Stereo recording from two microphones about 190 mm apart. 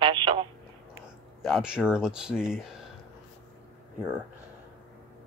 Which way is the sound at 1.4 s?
Centre (ahead or behind).